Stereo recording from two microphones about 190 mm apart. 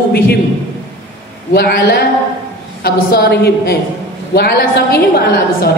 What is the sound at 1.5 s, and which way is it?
A woman's voice, 55° left (ahead or behind).